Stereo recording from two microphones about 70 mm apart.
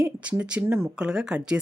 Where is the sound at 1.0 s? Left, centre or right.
Centre.